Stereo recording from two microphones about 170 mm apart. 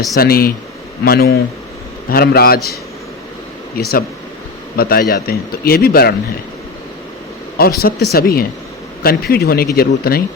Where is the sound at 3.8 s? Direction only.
65° left (ahead or behind).